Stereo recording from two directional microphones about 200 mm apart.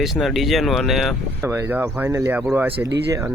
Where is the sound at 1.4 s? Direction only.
10° right (ahead or behind).